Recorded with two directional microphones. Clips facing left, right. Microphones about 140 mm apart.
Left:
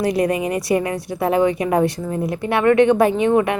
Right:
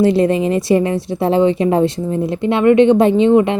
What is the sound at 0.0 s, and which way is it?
A woman's voice, 25° right (ahead or behind).